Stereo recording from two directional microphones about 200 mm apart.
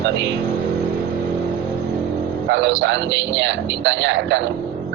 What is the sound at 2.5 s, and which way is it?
A man's voice, 65° right (ahead or behind).